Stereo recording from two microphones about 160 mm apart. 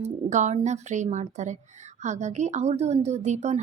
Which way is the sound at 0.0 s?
45° right (ahead or behind).